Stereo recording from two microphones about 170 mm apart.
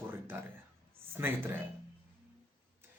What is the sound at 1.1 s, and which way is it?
Speech, 15° right (ahead or behind).